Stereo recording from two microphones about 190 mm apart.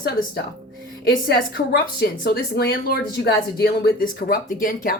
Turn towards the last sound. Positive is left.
turn(degrees=45)  # may be behind; listen again after turning